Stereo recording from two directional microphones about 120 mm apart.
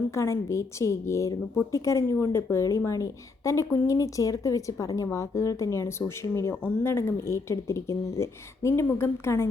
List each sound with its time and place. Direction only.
0.1 s speech: 25° left (ahead or behind)